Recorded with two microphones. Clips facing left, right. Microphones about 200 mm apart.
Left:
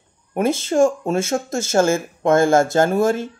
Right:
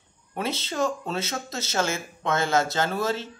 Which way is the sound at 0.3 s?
50° left (ahead or behind).